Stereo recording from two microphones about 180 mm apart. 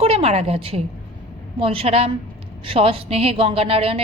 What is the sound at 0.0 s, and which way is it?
A woman's voice, 35° right (ahead or behind).